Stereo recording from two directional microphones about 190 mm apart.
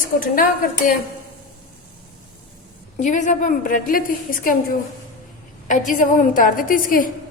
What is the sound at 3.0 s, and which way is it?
A woman's voice, 40° left (ahead or behind).